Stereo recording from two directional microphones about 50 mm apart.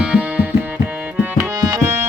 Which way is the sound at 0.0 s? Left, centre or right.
Right.